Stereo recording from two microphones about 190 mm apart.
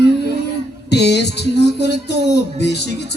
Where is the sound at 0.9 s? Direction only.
60° left (ahead or behind).